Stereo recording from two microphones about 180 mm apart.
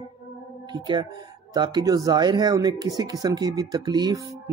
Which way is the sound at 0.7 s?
25° right (ahead or behind).